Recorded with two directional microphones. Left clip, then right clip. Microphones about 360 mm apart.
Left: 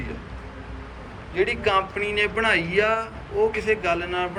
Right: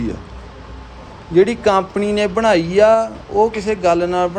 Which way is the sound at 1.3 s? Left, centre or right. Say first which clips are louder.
Right 8 dB; centre.